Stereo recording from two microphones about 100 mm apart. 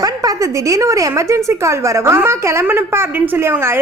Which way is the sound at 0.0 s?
35° right (ahead or behind).